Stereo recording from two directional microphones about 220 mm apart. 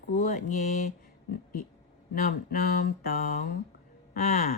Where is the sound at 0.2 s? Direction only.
35° left (ahead or behind).